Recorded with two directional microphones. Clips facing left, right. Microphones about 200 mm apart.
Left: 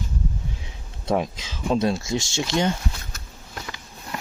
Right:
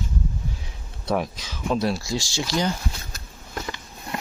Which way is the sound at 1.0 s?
20° left (ahead or behind).